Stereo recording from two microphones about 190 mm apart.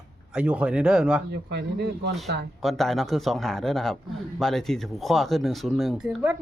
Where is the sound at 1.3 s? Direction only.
60° right (ahead or behind).